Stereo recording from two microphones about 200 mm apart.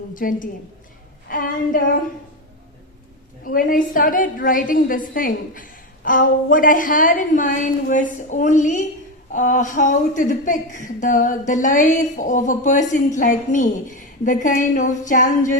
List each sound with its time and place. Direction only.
0.1 s a woman's voice: 40° left (ahead or behind)
3.4 s a woman's voice: 45° left (ahead or behind)